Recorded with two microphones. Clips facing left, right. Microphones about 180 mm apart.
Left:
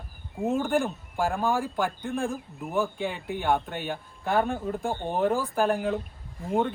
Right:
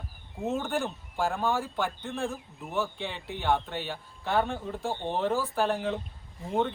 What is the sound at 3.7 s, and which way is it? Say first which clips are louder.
Speech: left 3 dB; 50° left (ahead or behind).